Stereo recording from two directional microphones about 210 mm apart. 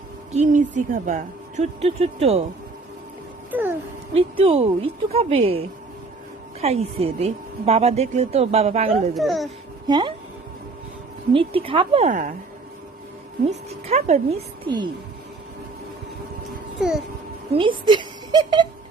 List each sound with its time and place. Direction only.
0.3 s a woman's voice: 35° right (ahead or behind)
3.5 s speech: 10° right (ahead or behind)
4.1 s a woman's voice: 30° right (ahead or behind)
9.1 s a child's voice: centre (ahead or behind)
9.8 s speech: 20° right (ahead or behind)
11.3 s a woman's voice: 25° right (ahead or behind)
13.7 s speech: 30° right (ahead or behind)
17.5 s speech: 25° right (ahead or behind)